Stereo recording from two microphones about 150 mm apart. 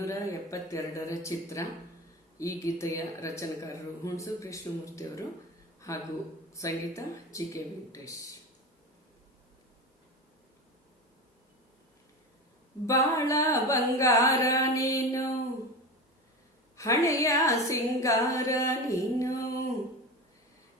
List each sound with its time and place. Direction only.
0.0 s speech: 20° left (ahead or behind)
6.5 s speech: 20° left (ahead or behind)
12.8 s speech: 20° left (ahead or behind)
16.7 s speech: 20° left (ahead or behind)